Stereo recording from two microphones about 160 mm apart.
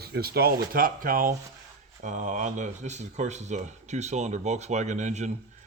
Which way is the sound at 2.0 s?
50° right (ahead or behind).